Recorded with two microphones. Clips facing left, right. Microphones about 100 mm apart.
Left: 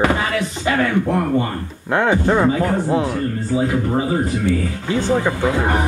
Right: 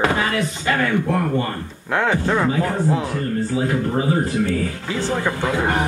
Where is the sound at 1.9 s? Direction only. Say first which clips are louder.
Left 3 dB; 15° left (ahead or behind).